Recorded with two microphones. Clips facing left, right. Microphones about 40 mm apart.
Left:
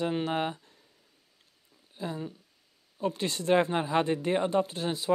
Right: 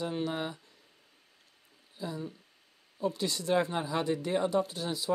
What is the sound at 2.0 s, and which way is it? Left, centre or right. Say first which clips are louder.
Speech: left 2 dB; left.